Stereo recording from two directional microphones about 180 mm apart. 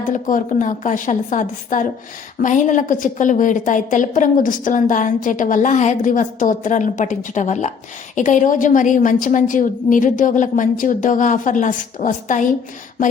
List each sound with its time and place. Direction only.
0.0 s a woman's voice: 45° left (ahead or behind)